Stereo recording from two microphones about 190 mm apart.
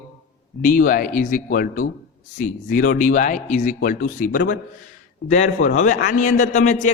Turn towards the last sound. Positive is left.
turn(degrees=40)  # may be behind; listen again after turning